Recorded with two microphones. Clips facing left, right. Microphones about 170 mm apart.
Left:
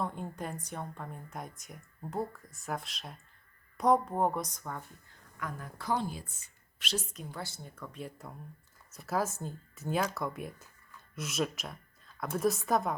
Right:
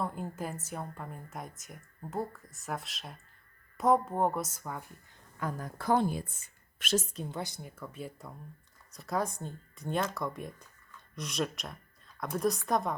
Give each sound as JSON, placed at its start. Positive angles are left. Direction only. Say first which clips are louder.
{"t": 0.0, "sound": "a woman's voice", "louder": "right 1 dB", "side_deg": -5}
{"t": 5.4, "sound": "a woman's voice", "louder": "right 4 dB", "side_deg": -35}
{"t": 7.2, "sound": "a woman's voice", "louder": "right 4 dB", "side_deg": -20}